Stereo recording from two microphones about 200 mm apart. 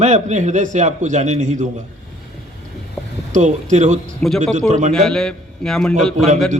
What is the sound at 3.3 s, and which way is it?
A man's voice, 35° right (ahead or behind).